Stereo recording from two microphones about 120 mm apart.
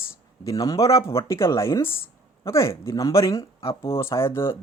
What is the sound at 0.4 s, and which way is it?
Speech, 30° left (ahead or behind).